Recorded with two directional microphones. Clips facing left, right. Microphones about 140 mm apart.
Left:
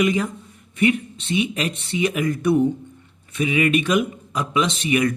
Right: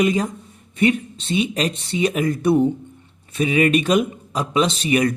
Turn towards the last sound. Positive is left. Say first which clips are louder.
# right 2 dB
turn(degrees=-35)  # may be behind; listen again after turning